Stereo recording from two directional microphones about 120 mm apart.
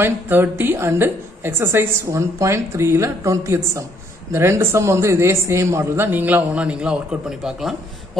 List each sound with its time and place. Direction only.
0.0 s a woman's voice: 20° right (ahead or behind)